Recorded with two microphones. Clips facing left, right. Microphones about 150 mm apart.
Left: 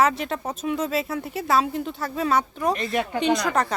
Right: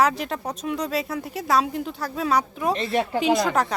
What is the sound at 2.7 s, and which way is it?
Speech, 30° right (ahead or behind).